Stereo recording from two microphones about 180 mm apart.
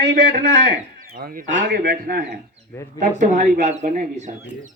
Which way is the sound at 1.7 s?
60° right (ahead or behind).